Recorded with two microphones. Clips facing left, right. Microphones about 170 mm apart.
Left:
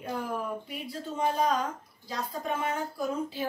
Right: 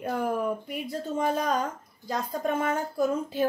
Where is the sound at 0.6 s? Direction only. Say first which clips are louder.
Right 5 dB; 50° right (ahead or behind).